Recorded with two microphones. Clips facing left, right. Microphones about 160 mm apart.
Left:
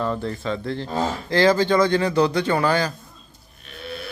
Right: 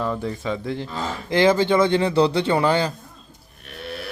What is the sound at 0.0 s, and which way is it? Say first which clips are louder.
Speech: even; 10° right (ahead or behind).